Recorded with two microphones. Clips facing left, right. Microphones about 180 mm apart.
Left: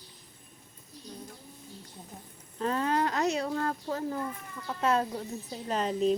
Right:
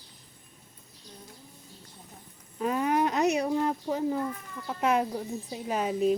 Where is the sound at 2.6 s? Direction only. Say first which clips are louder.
Right 2 dB; 10° right (ahead or behind).